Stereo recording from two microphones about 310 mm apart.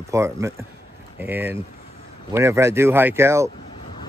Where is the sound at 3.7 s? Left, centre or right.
Centre.